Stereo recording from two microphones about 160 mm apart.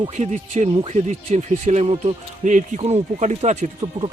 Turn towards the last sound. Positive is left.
turn(degrees=-40)  # may be behind; listen again after turning